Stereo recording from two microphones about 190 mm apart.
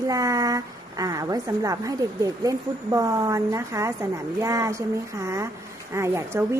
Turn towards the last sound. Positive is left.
turn(degrees=-15)  # may be behind; listen again after turning